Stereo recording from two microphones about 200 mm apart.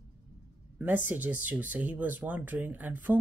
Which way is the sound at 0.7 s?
10° right (ahead or behind).